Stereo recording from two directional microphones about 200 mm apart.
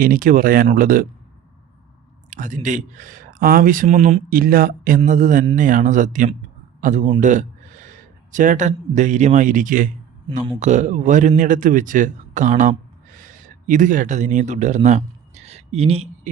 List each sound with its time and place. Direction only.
0.0 s speech: 45° right (ahead or behind)
2.3 s a man's voice: 40° right (ahead or behind)